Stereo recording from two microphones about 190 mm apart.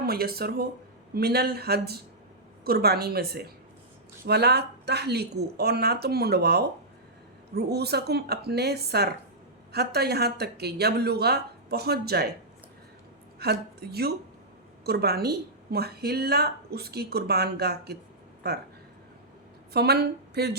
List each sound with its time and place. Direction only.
0.0 s a woman's voice: 55° right (ahead or behind)
13.4 s a woman's voice: 55° right (ahead or behind)
19.7 s a woman's voice: 60° right (ahead or behind)